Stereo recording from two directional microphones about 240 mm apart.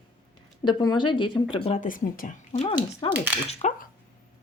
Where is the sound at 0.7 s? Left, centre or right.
Centre.